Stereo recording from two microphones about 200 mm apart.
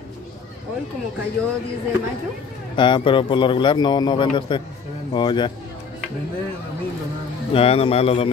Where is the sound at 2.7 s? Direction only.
25° left (ahead or behind).